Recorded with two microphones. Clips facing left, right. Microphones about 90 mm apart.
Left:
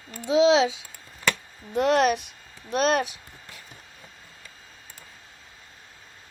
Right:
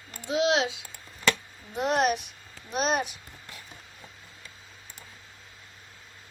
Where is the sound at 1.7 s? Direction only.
90° left.